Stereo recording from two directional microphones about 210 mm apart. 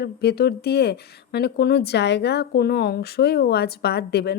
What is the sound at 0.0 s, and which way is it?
Speech, 50° left (ahead or behind).